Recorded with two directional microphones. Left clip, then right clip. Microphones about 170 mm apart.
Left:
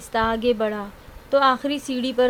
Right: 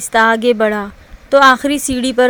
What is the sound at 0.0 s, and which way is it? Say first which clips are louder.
Speech: right 10 dB; 30° right (ahead or behind).